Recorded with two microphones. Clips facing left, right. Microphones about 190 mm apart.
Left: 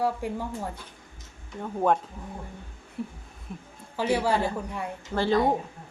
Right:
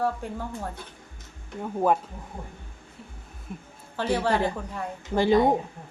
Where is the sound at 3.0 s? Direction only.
60° left (ahead or behind).